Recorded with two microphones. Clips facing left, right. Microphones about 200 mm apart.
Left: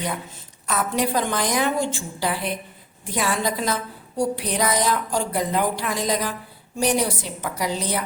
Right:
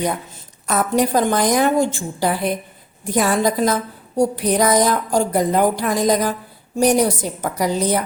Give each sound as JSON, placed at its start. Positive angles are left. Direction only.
{"t": 0.7, "sound": "a woman's voice", "side_deg": -45}